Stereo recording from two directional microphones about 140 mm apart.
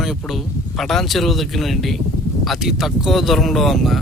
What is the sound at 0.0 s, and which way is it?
Speech, centre (ahead or behind).